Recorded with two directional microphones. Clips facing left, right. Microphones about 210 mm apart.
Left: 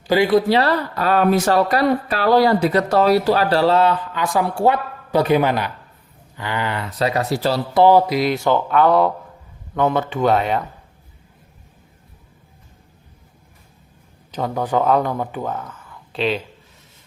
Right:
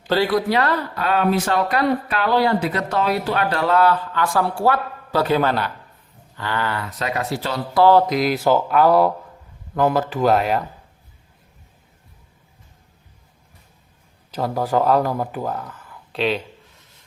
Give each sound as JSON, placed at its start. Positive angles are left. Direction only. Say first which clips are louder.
{"t": 0.1, "sound": "speech", "louder": "left 3 dB", "side_deg": 15}
{"t": 0.3, "sound": "speech", "louder": "left 4 dB", "side_deg": 30}
{"t": 7.0, "sound": "speech", "louder": "left 6 dB", "side_deg": 35}
{"t": 7.7, "sound": "speech", "louder": "left 1 dB", "side_deg": 15}
{"t": 8.1, "sound": "speech", "louder": "even", "side_deg": 0}
{"t": 14.3, "sound": "speech", "louder": "even", "side_deg": -5}